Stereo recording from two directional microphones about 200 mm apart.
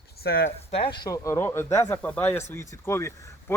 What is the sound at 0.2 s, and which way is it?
Speech, 50° left (ahead or behind).